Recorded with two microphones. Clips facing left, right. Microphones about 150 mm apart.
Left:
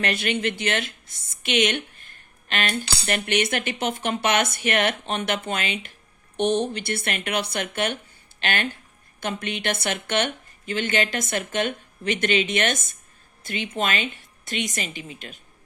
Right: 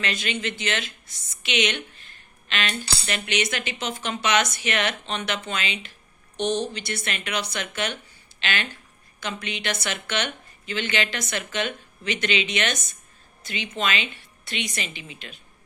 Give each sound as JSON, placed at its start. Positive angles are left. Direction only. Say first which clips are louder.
{"t": 0.0, "sound": "speech", "louder": "left 4 dB", "side_deg": 55}
{"t": 1.3, "sound": "a sound", "louder": "left 3 dB", "side_deg": 50}
{"t": 3.1, "sound": "a woman's voice", "louder": "left 4 dB", "side_deg": 55}